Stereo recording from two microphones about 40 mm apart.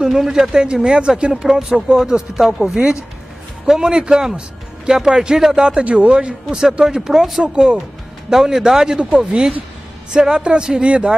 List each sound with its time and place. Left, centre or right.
0.0 s a woman's voice: centre